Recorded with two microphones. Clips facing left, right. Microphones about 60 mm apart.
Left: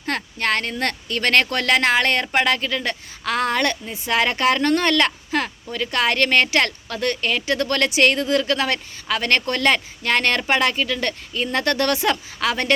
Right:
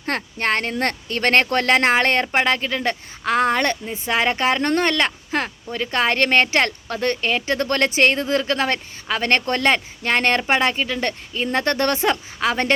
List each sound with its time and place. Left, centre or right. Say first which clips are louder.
0.0 s speech: right 1 dB; right